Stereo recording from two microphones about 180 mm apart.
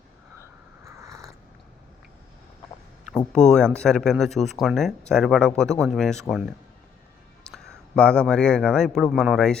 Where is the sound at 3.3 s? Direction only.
5° left (ahead or behind).